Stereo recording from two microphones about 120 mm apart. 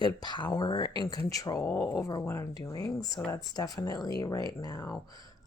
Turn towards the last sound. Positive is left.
turn(degrees=25)  # may be behind; listen again after turning